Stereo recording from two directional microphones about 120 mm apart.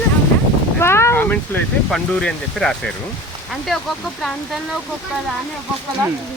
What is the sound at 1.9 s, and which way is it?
Speech, 5° left (ahead or behind).